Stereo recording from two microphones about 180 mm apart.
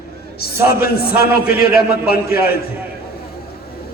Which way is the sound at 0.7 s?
60° left (ahead or behind).